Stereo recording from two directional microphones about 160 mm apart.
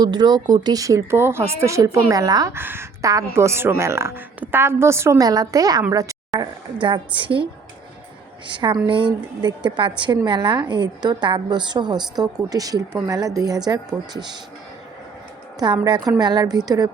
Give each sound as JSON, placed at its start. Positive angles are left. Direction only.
{"t": 0.0, "sound": "a woman's voice", "side_deg": -25}
{"t": 8.4, "sound": "a woman's voice", "side_deg": -30}
{"t": 15.5, "sound": "a woman's voice", "side_deg": -25}